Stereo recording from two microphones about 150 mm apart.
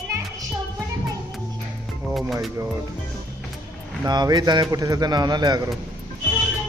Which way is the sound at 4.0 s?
30° right (ahead or behind).